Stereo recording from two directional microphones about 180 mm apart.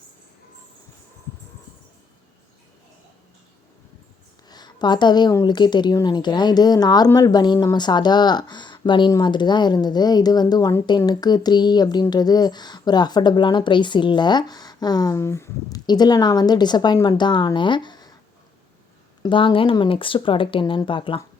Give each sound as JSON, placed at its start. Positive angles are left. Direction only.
{"t": 4.4, "sound": "speech", "side_deg": 25}
{"t": 19.2, "sound": "speech", "side_deg": 25}